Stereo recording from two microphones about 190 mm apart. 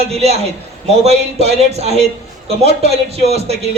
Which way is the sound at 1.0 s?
35° right (ahead or behind).